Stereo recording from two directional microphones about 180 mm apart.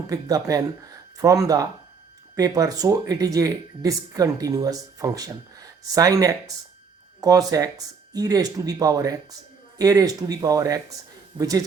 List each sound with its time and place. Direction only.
0.1 s speech: 20° right (ahead or behind)